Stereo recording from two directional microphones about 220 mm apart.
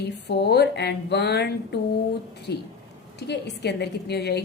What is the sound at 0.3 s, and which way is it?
A woman's voice, 50° left (ahead or behind).